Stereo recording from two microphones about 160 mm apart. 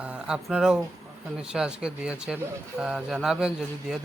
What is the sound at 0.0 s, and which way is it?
Speech, 5° right (ahead or behind).